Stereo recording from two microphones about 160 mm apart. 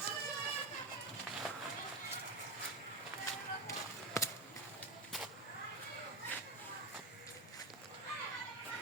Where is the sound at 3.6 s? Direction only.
20° left (ahead or behind).